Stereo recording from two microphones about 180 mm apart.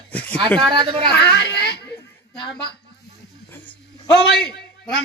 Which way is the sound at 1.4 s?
70° left (ahead or behind).